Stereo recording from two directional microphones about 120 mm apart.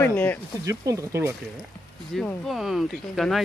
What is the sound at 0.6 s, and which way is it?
Speech, 25° right (ahead or behind).